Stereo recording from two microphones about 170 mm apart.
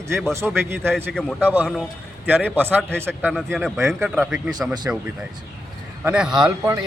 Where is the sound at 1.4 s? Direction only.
10° right (ahead or behind).